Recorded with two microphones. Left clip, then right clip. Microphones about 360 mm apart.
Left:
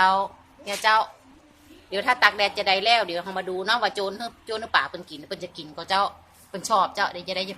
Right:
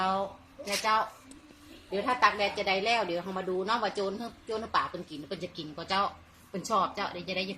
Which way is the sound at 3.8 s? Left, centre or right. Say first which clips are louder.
Left 6 dB; left.